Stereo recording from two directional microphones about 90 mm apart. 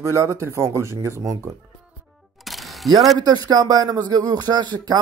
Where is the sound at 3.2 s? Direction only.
50° right (ahead or behind).